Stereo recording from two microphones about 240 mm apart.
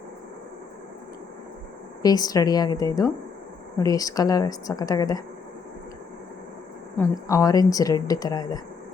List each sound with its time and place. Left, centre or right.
2.0 s speech: centre
6.9 s speech: centre